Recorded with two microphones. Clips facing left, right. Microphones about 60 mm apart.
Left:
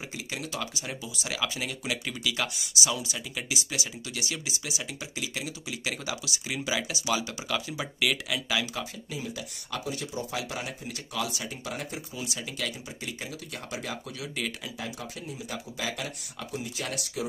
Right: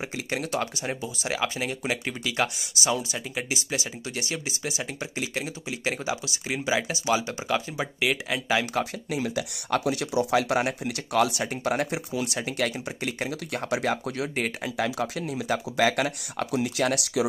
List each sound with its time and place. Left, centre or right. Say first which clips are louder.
0.1 s speech: right 7 dB; right
8.7 s speech: right 8 dB; right
14.8 s speech: right 10 dB; right